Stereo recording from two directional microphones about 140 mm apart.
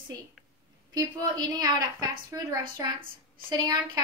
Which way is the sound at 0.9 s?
30° right (ahead or behind).